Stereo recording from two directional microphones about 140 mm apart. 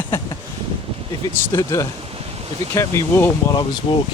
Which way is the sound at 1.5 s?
20° left (ahead or behind).